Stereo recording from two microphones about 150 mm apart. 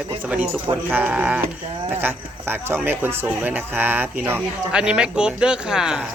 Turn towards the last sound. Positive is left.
turn(degrees=-5)  # may be behind; listen again after turning